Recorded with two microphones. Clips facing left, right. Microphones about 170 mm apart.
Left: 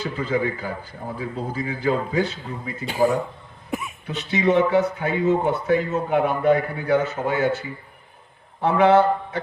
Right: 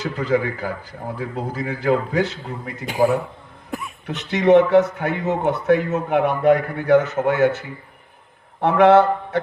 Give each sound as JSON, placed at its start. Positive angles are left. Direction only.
{"t": 0.0, "sound": "speech", "side_deg": -70}
{"t": 2.8, "sound": "a man's voice", "side_deg": -15}
{"t": 3.7, "sound": "cough", "side_deg": 5}
{"t": 4.0, "sound": "speech", "side_deg": -70}
{"t": 8.6, "sound": "a sound", "side_deg": -65}